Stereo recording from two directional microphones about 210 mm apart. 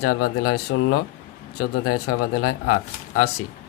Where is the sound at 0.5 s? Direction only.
90° left.